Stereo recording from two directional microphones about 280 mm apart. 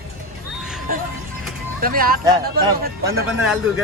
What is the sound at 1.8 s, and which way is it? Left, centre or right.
Speech, right.